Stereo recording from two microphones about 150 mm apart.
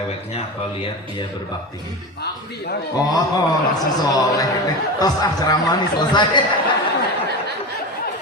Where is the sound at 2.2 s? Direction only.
90° left.